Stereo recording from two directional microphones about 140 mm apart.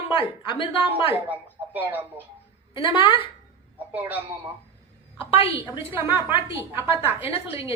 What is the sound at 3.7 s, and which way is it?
Speech, 10° right (ahead or behind).